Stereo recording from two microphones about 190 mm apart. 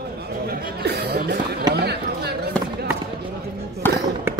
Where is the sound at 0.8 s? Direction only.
60° right (ahead or behind).